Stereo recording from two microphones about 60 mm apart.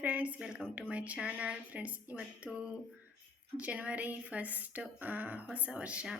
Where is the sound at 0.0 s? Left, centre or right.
Right.